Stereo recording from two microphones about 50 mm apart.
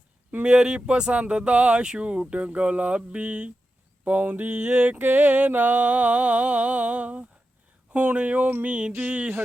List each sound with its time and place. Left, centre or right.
0.3 s speech: right
4.0 s a sound: right
7.9 s speech: right